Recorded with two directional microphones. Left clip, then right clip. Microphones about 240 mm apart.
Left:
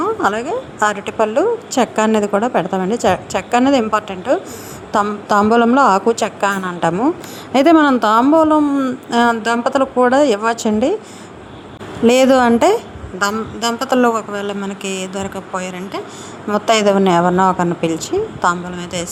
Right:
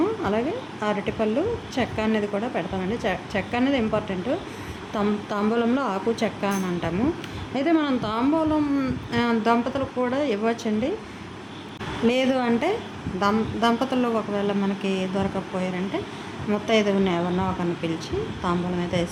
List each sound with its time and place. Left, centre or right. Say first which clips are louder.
0.2 s a woman's voice: left 8 dB; left
12.0 s a woman's voice: left 12 dB; left